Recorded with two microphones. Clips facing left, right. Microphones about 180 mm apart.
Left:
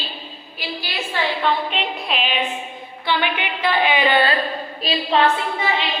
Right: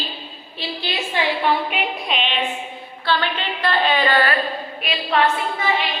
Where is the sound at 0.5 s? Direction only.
25° right (ahead or behind).